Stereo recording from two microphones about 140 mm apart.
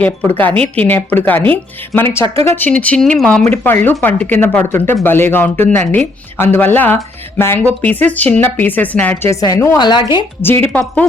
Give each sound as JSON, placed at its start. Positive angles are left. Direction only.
{"t": 0.0, "sound": "speech", "side_deg": 10}
{"t": 2.2, "sound": "speech", "side_deg": -45}
{"t": 2.6, "sound": "speech", "side_deg": 10}
{"t": 10.4, "sound": "speech", "side_deg": 15}